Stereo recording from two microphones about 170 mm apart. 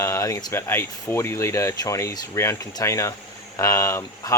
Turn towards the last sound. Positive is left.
turn(degrees=20)  # may be behind; listen again after turning